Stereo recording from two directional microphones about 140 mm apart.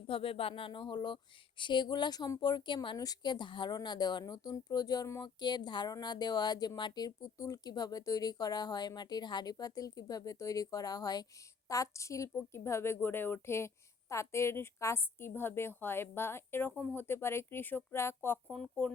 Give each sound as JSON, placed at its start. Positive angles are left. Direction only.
{"t": 0.1, "sound": "speech", "side_deg": 40}
{"t": 18.4, "sound": "speech", "side_deg": 5}